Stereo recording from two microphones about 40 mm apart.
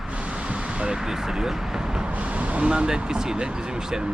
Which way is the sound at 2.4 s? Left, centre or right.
Right.